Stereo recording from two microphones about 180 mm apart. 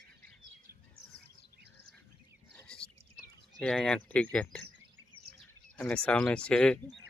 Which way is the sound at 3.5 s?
5° left (ahead or behind).